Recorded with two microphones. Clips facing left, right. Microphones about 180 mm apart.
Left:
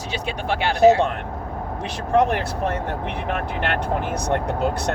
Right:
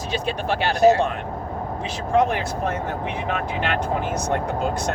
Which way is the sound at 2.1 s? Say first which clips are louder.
Left 1 dB; 60° left (ahead or behind).